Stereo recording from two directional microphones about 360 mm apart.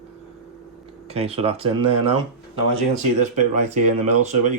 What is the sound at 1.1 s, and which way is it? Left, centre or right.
Speech, centre.